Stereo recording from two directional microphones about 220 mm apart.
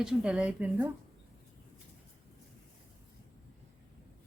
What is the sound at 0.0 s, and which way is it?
Speech, 5° right (ahead or behind).